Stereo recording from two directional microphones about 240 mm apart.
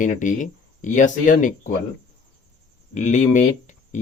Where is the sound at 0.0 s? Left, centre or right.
Left.